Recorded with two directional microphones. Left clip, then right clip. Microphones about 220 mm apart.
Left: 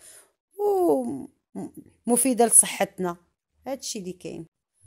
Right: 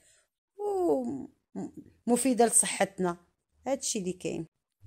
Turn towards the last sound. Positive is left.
turn(degrees=-10)  # may be behind; listen again after turning